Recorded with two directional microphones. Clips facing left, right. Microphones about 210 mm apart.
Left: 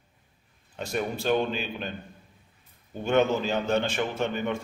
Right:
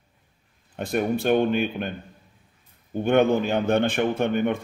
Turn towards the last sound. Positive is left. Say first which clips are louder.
# right 6 dB
turn(degrees=-55)  # may be behind; listen again after turning